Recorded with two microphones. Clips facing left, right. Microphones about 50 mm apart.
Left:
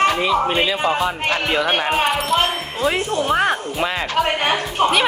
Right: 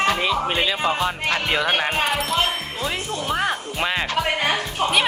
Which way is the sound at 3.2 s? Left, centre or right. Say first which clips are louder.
Left 3 dB; centre.